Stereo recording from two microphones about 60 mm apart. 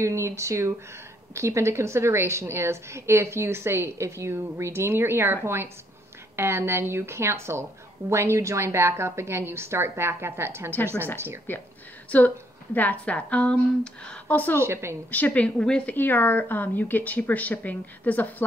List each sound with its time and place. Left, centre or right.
0.0 s a woman's voice: right
11.5 s speech: left
12.1 s speech: left
14.0 s a sound: centre
14.3 s speech: left
14.6 s a woman's voice: right
15.0 s speech: left
15.5 s a woman's voice: centre
15.9 s speech: left